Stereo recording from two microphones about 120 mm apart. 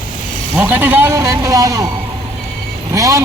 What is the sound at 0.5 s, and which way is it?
Speech, 15° right (ahead or behind).